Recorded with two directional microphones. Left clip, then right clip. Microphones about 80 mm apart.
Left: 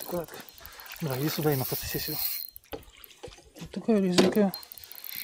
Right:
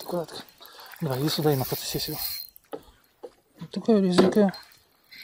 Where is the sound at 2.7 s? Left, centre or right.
Left.